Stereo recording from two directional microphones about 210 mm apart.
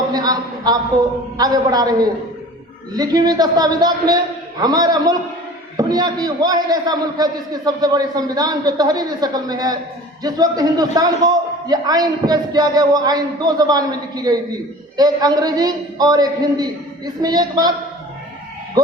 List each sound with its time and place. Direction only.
0.1 s a man's voice: 20° right (ahead or behind)